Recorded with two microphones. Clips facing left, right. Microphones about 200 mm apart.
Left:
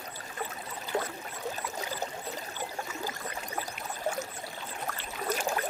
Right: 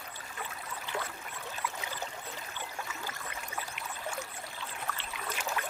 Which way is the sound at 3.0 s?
40° left (ahead or behind).